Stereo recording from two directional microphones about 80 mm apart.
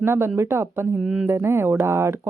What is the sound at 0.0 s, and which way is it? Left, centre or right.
Speech, right.